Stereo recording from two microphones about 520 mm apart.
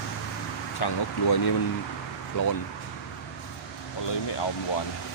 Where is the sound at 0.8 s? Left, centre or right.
Left.